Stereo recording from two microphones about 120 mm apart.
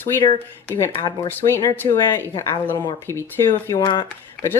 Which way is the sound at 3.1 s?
25° right (ahead or behind).